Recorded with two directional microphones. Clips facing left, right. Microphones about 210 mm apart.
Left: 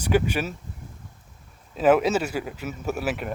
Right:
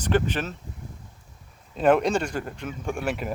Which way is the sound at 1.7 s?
5° left (ahead or behind).